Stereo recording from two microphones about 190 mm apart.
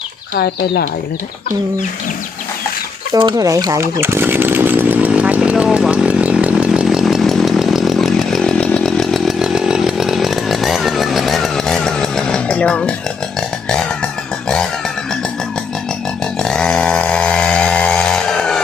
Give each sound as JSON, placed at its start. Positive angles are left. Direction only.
{"t": 0.3, "sound": "speech", "side_deg": 55}
{"t": 3.1, "sound": "speech", "side_deg": -20}
{"t": 4.0, "sound": "chainsaw", "side_deg": -10}
{"t": 13.7, "sound": "a sound", "side_deg": 5}
{"t": 16.2, "sound": "chainsaw", "side_deg": 5}